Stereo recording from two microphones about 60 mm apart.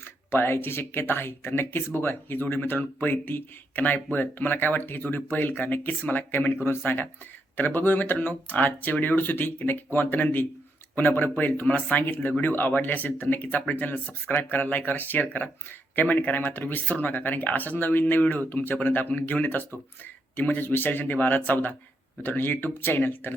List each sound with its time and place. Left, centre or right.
0.0 s speech: left